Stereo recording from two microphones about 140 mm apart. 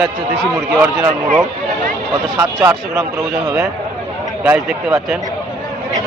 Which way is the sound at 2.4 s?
20° right (ahead or behind).